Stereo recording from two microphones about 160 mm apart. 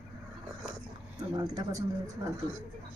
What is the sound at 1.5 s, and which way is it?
Speech, 20° right (ahead or behind).